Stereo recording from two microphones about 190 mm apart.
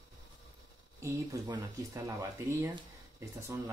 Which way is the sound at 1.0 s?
20° right (ahead or behind).